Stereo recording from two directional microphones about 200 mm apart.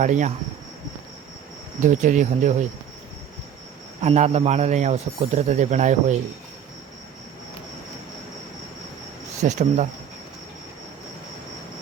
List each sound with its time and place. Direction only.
0.0 s speech: 40° right (ahead or behind)
1.8 s speech: 40° right (ahead or behind)
4.0 s speech: 35° right (ahead or behind)
9.4 s speech: 35° right (ahead or behind)